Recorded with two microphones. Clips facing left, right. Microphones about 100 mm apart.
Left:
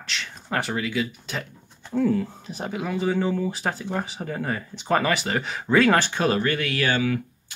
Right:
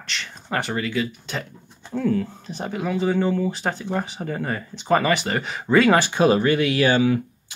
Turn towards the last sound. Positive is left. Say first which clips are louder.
# right 5 dB
turn(degrees=-20)  # may be behind; listen again after turning